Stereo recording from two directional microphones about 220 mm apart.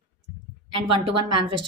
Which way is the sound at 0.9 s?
25° right (ahead or behind).